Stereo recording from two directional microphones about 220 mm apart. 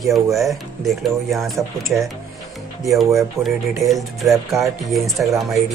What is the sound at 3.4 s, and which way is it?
Speech, 10° right (ahead or behind).